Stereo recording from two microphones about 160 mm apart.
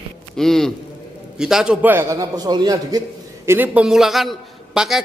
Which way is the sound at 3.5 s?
10° right (ahead or behind).